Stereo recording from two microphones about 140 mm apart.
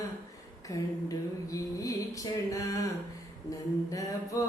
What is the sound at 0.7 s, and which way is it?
Mantra, 25° left (ahead or behind).